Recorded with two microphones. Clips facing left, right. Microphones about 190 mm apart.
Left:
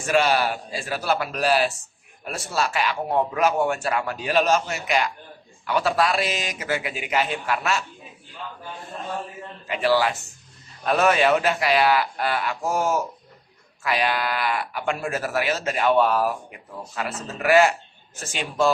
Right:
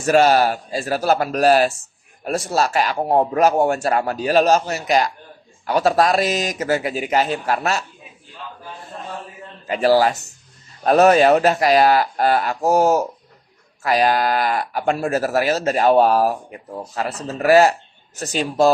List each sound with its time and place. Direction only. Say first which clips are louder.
0.0 s speech: right 6 dB; 40° right (ahead or behind)
9.6 s speech: right 5 dB; 40° right (ahead or behind)